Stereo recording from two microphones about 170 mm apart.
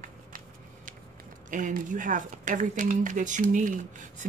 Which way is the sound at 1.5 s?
50° right (ahead or behind).